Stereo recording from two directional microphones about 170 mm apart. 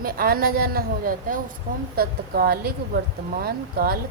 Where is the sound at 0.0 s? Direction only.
60° right (ahead or behind).